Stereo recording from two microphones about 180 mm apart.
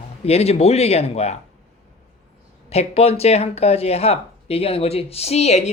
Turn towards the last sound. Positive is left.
turn(degrees=35)  # may be behind; listen again after turning